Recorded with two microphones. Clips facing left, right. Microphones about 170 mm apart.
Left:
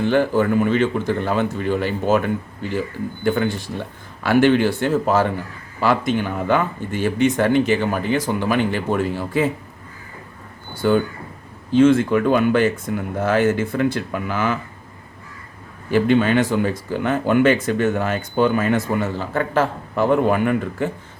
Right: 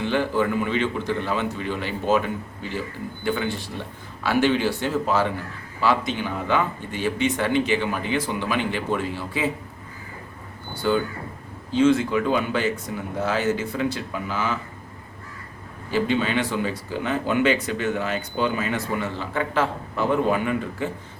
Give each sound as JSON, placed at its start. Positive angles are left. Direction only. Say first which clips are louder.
{"t": 0.0, "sound": "speech", "louder": "left 5 dB", "side_deg": 45}
{"t": 10.8, "sound": "speech", "louder": "left 5 dB", "side_deg": 50}
{"t": 15.9, "sound": "speech", "louder": "left 6 dB", "side_deg": 50}